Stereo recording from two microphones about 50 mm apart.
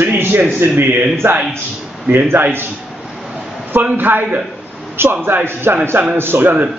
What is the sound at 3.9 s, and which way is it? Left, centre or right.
A man's voice, right.